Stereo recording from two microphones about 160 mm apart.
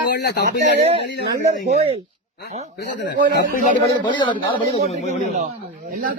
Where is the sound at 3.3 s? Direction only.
55° left (ahead or behind).